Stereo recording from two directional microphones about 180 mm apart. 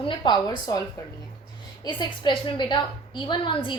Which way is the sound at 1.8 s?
25° left (ahead or behind).